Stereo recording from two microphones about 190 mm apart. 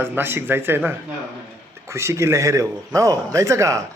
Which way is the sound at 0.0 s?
10° right (ahead or behind).